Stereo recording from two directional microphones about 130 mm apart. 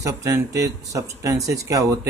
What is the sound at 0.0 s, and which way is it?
Speech, 25° right (ahead or behind).